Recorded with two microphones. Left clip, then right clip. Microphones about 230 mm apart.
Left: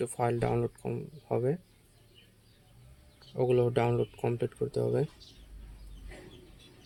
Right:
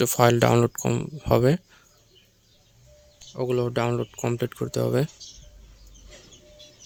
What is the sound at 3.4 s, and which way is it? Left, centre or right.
Speech, right.